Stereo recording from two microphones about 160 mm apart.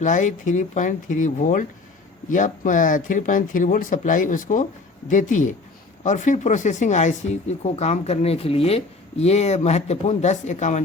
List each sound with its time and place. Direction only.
0.0 s speech: 50° left (ahead or behind)